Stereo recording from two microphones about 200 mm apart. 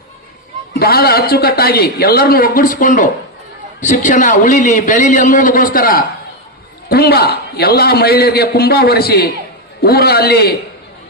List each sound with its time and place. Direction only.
0.7 s a man's voice: 50° left (ahead or behind)